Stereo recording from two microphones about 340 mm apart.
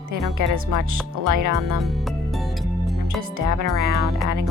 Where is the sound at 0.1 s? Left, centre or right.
Right.